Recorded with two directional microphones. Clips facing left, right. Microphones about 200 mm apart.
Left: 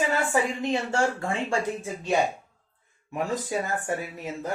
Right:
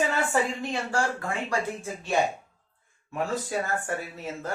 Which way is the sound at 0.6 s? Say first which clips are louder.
Left 3 dB; 25° left (ahead or behind).